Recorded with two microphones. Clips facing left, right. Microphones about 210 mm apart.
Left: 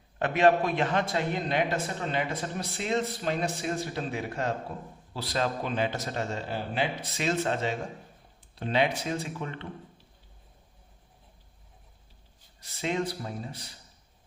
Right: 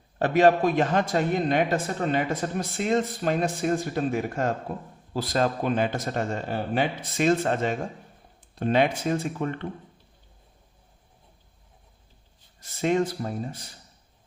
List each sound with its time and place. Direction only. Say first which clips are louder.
0.2 s a man's voice: right 4 dB; 40° right (ahead or behind)
12.5 s a man's voice: right 7 dB; 50° right (ahead or behind)